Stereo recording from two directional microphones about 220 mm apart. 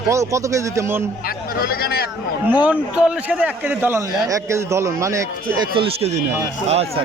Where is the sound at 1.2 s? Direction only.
45° left (ahead or behind).